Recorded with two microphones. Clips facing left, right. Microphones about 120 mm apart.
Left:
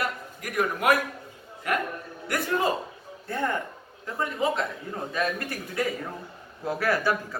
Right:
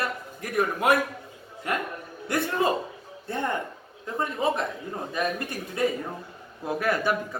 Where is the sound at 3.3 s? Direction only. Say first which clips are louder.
Even; 20° right (ahead or behind).